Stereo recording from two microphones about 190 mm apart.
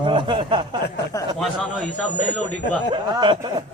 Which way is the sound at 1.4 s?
Centre (ahead or behind).